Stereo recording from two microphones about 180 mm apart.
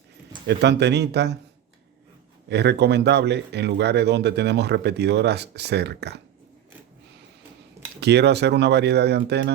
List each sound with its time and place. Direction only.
0.4 s speech: 70° right (ahead or behind)
2.5 s speech: 70° right (ahead or behind)
8.0 s speech: 70° right (ahead or behind)